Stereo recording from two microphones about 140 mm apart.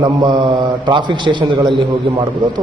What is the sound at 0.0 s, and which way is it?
A man's voice, 30° right (ahead or behind).